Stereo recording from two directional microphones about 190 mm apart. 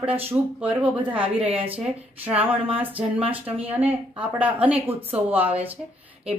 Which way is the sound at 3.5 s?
10° right (ahead or behind).